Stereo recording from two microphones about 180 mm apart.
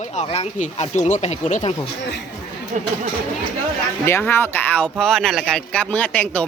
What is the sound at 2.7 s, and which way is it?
Speech, 45° right (ahead or behind).